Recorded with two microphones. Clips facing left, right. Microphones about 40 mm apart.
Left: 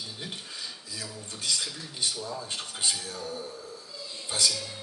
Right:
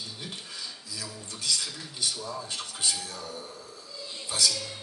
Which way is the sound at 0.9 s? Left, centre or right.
Left.